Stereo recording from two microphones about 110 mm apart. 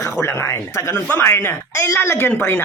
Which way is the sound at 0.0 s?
25° left (ahead or behind).